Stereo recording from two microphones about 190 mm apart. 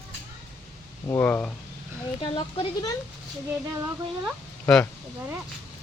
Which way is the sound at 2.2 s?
25° left (ahead or behind).